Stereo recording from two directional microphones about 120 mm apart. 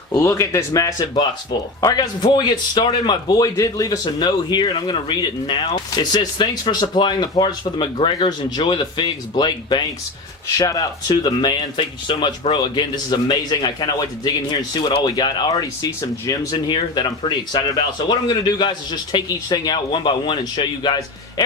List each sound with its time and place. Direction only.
0.1 s a man's voice: 25° left (ahead or behind)